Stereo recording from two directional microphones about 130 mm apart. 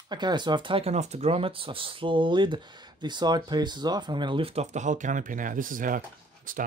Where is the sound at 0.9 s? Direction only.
60° right (ahead or behind).